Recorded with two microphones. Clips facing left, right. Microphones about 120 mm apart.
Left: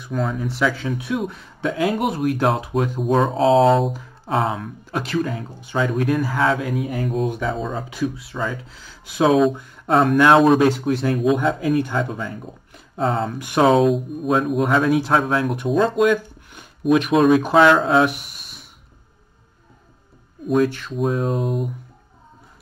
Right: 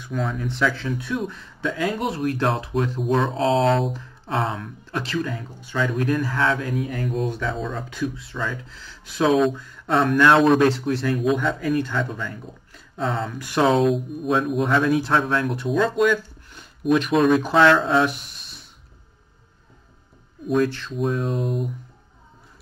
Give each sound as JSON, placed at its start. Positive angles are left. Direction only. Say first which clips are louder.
{"t": 0.2, "sound": "speech", "louder": "left 2 dB", "side_deg": 0}
{"t": 11.3, "sound": "speech", "louder": "left 3 dB", "side_deg": 40}
{"t": 11.8, "sound": "speech", "louder": "left 3 dB", "side_deg": 10}
{"t": 12.9, "sound": "speech", "louder": "left 4 dB", "side_deg": 40}
{"t": 13.4, "sound": "speech", "louder": "left 3 dB", "side_deg": 15}
{"t": 13.7, "sound": "speech", "louder": "left 3 dB", "side_deg": 0}
{"t": 16.8, "sound": "speech", "louder": "left 3 dB", "side_deg": 0}
{"t": 20.4, "sound": "speech", "louder": "left 2 dB", "side_deg": 0}